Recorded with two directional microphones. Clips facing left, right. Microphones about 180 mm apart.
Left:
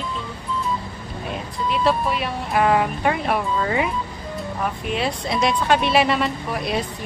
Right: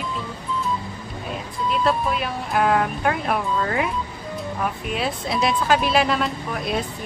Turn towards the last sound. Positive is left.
turn(degrees=0)  # may be behind; listen again after turning